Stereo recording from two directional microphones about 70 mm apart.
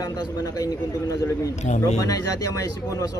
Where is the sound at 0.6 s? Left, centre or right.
Left.